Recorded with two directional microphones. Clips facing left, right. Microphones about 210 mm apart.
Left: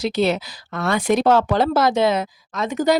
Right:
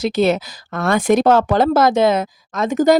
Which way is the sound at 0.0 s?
50° right (ahead or behind).